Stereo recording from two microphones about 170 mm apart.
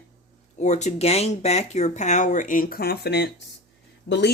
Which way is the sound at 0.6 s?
45° left (ahead or behind).